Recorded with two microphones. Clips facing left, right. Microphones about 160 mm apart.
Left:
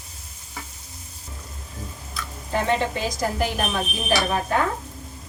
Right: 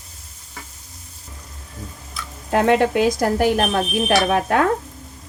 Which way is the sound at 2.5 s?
65° right (ahead or behind).